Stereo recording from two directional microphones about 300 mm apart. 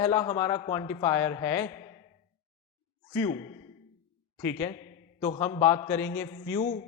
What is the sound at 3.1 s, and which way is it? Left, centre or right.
A man's voice, centre.